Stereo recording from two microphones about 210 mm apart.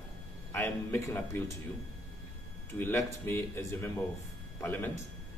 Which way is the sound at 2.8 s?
10° left (ahead or behind).